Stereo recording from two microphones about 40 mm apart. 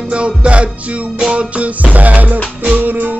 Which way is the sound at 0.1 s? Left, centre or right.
Right.